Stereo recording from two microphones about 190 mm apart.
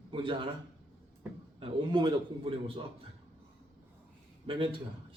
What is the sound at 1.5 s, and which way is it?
A man's voice, 25° right (ahead or behind).